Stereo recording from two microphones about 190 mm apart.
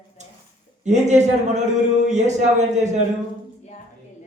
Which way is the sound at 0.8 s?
40° right (ahead or behind).